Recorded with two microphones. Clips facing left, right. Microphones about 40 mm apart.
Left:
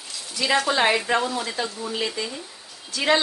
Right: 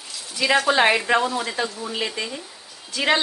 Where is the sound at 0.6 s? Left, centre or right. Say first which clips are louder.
Right 3 dB; right.